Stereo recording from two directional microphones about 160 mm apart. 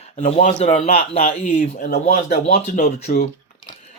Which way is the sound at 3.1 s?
70° left (ahead or behind).